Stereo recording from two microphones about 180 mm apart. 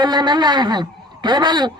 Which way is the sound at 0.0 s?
25° right (ahead or behind).